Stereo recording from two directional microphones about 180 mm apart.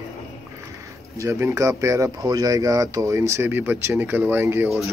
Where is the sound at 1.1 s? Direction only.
15° right (ahead or behind).